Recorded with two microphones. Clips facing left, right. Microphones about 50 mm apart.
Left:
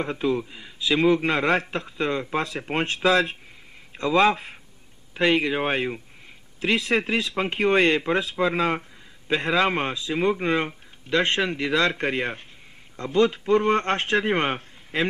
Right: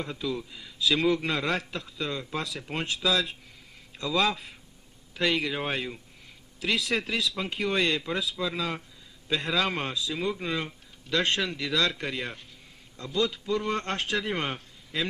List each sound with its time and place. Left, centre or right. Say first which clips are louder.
0.0 s a man's voice: left 8 dB; left